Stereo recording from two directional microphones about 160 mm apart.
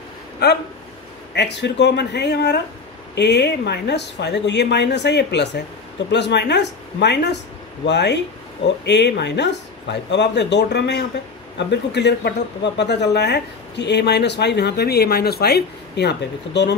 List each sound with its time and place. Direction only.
0.4 s speech: 90° left